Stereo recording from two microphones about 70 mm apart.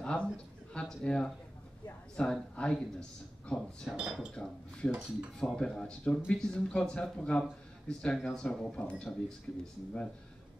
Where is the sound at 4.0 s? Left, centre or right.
Centre.